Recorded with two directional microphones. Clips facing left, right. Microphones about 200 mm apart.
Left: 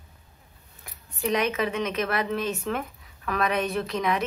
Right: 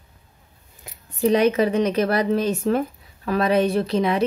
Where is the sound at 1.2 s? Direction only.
35° right (ahead or behind).